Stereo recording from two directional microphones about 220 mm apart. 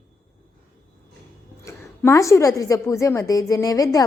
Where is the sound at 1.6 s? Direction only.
15° left (ahead or behind).